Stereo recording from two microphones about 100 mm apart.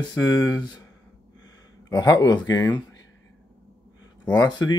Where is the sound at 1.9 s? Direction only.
40° left (ahead or behind).